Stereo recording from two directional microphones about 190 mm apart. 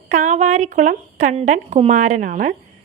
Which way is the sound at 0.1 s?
40° right (ahead or behind).